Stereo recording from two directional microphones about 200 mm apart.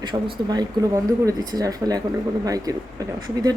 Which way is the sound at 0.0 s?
20° right (ahead or behind).